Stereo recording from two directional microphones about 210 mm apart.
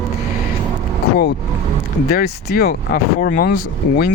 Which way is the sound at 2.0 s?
45° left (ahead or behind).